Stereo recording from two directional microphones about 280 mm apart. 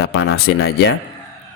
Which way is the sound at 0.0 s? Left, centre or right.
Left.